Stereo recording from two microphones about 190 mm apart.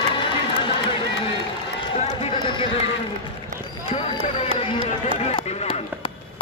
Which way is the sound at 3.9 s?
30° left (ahead or behind).